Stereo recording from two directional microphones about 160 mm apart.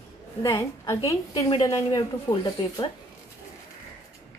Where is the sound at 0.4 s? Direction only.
20° left (ahead or behind).